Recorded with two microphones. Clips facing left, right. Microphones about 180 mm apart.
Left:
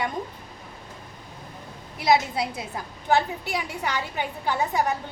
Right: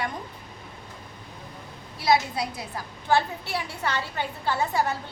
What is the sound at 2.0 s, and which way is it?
A woman's voice, 20° left (ahead or behind).